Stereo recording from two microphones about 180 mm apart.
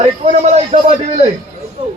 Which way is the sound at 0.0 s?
40° right (ahead or behind).